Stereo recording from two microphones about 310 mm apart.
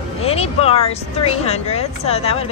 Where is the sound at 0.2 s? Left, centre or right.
Centre.